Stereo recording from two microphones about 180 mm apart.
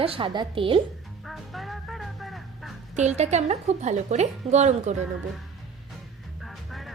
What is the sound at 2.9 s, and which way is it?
A woman's voice, 40° right (ahead or behind).